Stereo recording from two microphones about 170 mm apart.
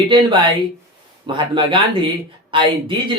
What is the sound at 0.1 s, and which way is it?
Speech, 30° right (ahead or behind).